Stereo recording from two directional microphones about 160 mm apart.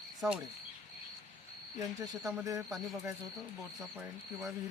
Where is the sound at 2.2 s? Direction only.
10° right (ahead or behind).